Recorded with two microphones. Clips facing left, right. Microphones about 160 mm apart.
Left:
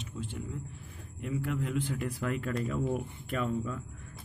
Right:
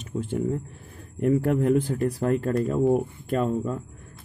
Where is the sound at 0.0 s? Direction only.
50° right (ahead or behind).